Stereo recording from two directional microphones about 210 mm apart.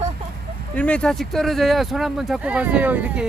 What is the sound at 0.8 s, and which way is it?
Speech, 5° left (ahead or behind).